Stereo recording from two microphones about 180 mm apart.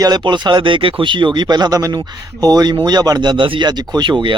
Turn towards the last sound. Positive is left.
turn(degrees=-25)  # may be behind; listen again after turning